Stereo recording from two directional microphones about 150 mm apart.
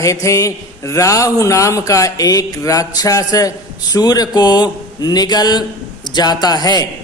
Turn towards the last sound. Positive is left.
turn(degrees=25)  # may be behind; listen again after turning